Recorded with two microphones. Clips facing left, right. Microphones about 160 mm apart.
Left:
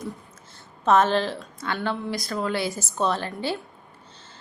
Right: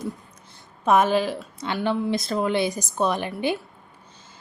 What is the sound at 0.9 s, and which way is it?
A woman's voice, 10° right (ahead or behind).